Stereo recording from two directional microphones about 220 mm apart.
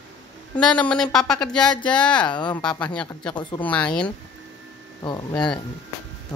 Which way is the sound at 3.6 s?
5° left (ahead or behind).